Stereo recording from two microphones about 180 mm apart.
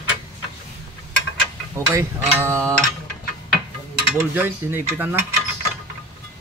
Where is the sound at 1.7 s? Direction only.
15° right (ahead or behind).